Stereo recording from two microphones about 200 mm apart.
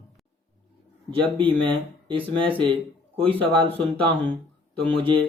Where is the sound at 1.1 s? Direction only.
25° right (ahead or behind).